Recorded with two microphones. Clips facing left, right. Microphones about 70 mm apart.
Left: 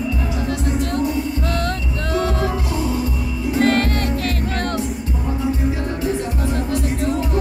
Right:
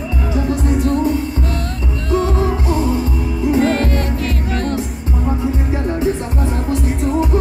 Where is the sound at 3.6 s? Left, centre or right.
Left.